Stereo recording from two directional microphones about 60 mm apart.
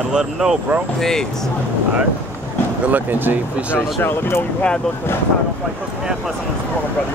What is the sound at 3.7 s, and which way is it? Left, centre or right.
Speech, left.